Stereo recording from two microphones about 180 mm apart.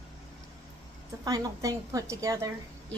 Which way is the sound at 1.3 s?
20° right (ahead or behind).